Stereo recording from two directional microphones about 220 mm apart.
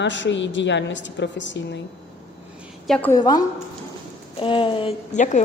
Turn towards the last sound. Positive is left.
turn(degrees=35)  # may be behind; listen again after turning